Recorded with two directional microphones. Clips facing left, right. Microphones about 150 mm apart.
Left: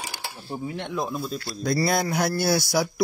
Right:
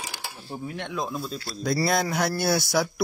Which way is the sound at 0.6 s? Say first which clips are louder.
Left 2 dB; 15° left (ahead or behind).